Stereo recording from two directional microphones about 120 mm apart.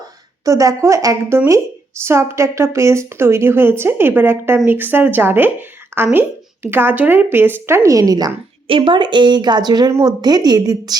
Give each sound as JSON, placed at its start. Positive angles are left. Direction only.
{"t": 0.4, "sound": "a woman's voice", "side_deg": -25}
{"t": 8.6, "sound": "a woman's voice", "side_deg": -45}